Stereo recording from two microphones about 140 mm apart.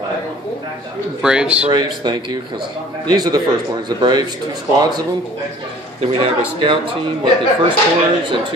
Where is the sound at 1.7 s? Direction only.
30° right (ahead or behind).